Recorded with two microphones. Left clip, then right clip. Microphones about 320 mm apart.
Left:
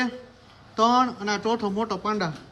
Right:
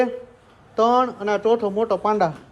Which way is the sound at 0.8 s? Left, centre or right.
Centre.